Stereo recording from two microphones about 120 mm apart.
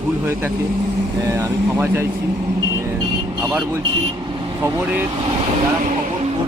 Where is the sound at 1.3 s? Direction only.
25° right (ahead or behind).